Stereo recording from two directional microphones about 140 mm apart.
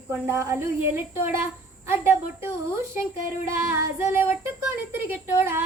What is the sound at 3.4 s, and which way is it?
Child singing, 20° right (ahead or behind).